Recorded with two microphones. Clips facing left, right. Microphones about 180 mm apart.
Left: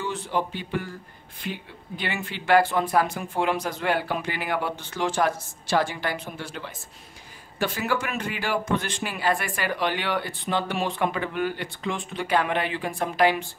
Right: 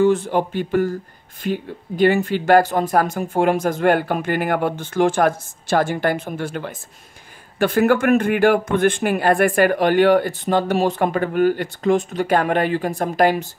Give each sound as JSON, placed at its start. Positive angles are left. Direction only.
{"t": 0.0, "sound": "speech", "side_deg": -50}